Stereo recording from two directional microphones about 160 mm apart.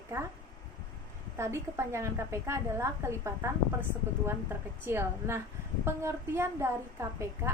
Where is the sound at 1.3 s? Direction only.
15° right (ahead or behind).